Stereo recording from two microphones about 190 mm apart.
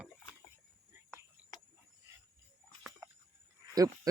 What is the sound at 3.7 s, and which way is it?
Goat, 20° right (ahead or behind).